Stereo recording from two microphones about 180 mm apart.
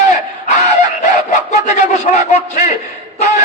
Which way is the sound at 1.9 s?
40° left (ahead or behind).